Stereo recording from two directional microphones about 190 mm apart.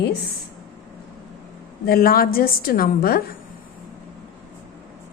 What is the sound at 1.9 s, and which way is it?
A woman's voice, 50° left (ahead or behind).